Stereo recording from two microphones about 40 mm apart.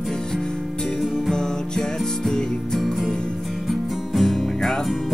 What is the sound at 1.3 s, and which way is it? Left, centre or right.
Music, centre.